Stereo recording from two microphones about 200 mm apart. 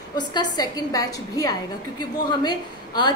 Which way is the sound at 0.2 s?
20° left (ahead or behind).